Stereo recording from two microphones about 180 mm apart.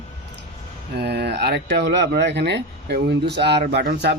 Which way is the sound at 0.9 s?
65° right (ahead or behind).